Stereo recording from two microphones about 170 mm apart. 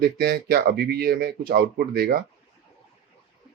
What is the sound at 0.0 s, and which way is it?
Speech, 70° right (ahead or behind).